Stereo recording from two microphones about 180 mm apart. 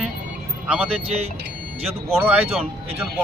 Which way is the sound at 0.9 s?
35° right (ahead or behind).